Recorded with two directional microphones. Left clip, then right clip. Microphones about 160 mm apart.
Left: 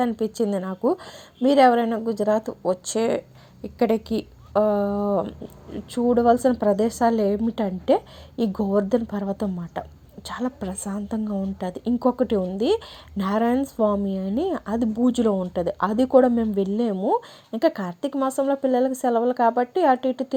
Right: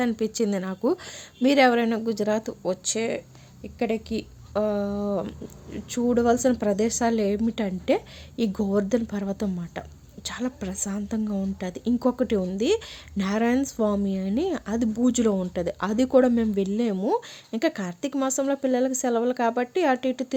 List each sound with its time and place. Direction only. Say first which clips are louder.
0.2 s a woman's voice: left 2 dB; 5° right (ahead or behind)
3.6 s speech: left 5 dB; 25° left (ahead or behind); by 5.2 s 5° left (ahead or behind)
5.7 s a woman's voice: left 3 dB; 5° right (ahead or behind)